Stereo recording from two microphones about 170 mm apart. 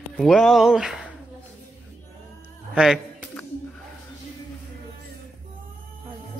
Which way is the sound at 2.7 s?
5° right (ahead or behind).